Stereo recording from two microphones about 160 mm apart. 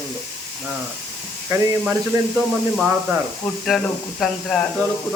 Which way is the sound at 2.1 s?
20° right (ahead or behind).